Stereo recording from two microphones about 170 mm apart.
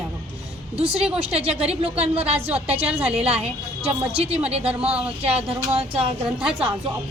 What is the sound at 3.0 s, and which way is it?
Speech, 5° right (ahead or behind).